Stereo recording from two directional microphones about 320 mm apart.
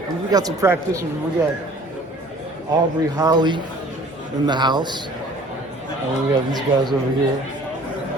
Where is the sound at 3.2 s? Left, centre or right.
Centre.